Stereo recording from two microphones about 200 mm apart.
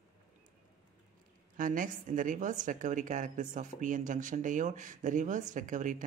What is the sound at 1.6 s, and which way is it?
A woman's voice, 40° right (ahead or behind).